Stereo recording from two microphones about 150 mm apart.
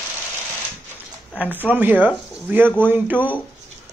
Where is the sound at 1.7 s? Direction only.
10° right (ahead or behind).